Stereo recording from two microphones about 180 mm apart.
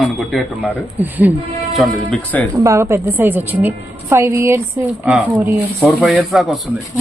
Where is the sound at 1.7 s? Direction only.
5° left (ahead or behind).